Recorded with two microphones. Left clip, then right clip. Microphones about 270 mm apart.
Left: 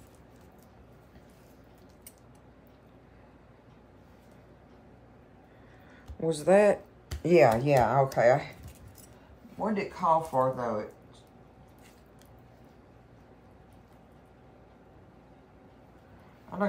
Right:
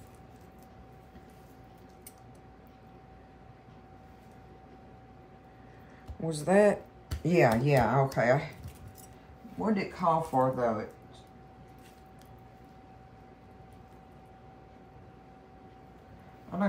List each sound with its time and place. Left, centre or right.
6.2 s speech: left
9.6 s speech: centre